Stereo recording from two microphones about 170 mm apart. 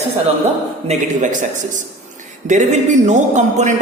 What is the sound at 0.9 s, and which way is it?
Speech, 50° right (ahead or behind).